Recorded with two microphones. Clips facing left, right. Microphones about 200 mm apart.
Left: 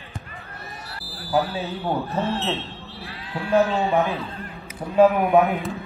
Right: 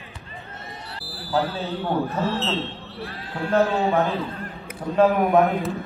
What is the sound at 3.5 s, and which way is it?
Speech, 15° left (ahead or behind).